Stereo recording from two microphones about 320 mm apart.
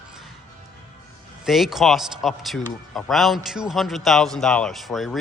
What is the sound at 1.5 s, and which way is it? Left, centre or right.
A man's voice, centre.